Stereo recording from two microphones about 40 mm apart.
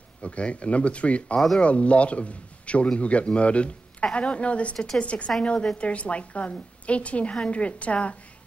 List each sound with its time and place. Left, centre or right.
0.2 s a man's voice: left